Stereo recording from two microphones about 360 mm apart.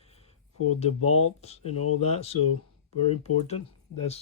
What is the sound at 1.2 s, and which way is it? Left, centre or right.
Speech, centre.